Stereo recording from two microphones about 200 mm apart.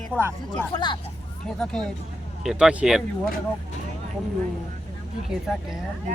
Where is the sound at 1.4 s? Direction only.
5° left (ahead or behind).